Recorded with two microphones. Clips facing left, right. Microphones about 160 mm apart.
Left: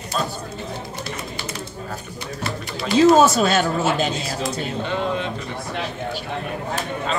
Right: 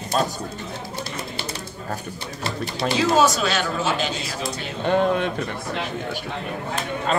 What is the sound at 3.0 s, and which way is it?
Speech, 50° left (ahead or behind).